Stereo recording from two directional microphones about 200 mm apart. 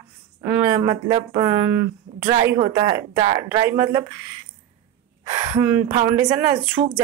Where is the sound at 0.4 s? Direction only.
20° right (ahead or behind).